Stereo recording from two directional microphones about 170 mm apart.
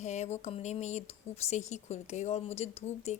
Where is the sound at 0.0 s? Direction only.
40° left (ahead or behind).